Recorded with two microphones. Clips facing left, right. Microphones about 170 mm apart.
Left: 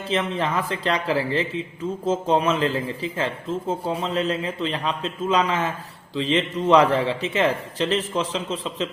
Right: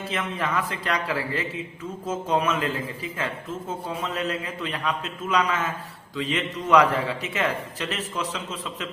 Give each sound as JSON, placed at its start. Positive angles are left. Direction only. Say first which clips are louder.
{"t": 0.1, "sound": "speech", "louder": "left 5 dB", "side_deg": 30}